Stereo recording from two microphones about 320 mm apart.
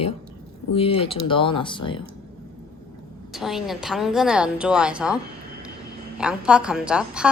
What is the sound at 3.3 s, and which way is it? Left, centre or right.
A woman's voice, centre.